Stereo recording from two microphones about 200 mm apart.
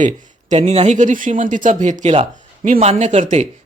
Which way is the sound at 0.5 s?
30° right (ahead or behind).